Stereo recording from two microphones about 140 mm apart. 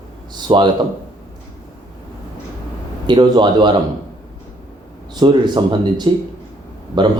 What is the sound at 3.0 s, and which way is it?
Speech, 30° right (ahead or behind).